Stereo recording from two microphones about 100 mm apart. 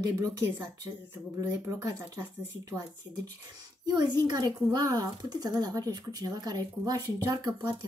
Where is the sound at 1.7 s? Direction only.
35° right (ahead or behind).